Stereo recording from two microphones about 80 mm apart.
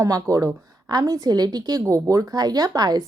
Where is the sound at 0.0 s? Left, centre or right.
Right.